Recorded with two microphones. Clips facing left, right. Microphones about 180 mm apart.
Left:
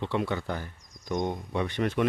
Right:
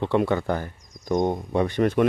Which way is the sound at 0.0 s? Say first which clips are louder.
Right 7 dB; 50° right (ahead or behind).